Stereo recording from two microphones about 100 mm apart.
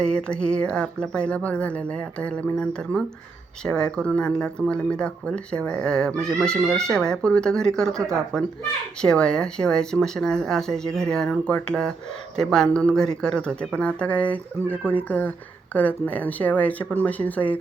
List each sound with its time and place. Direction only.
0.0 s speech: 10° left (ahead or behind)